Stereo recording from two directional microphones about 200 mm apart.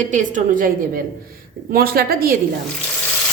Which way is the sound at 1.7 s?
50° right (ahead or behind).